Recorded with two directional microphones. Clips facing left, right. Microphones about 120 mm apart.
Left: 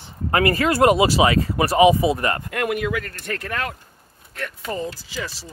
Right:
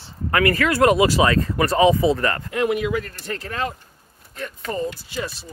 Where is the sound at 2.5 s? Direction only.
55° left (ahead or behind).